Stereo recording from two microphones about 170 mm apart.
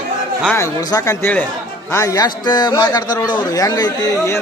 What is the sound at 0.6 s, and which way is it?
A man's voice, 20° left (ahead or behind).